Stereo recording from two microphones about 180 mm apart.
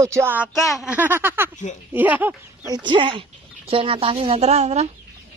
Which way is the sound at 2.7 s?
25° right (ahead or behind).